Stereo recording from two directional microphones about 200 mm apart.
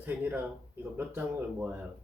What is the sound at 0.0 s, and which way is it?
Speech, 10° right (ahead or behind).